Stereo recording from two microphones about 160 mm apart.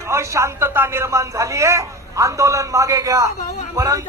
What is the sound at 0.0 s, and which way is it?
A man's voice, 15° right (ahead or behind).